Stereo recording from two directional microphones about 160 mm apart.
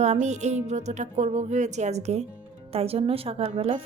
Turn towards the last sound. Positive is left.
turn(degrees=-35)  # may be behind; listen again after turning